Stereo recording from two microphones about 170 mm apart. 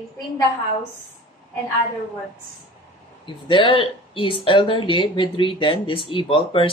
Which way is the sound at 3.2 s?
30° left (ahead or behind).